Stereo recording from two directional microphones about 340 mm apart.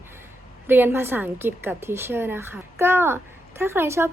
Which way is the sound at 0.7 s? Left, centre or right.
Centre.